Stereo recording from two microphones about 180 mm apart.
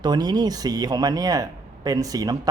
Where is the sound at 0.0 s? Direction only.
25° right (ahead or behind).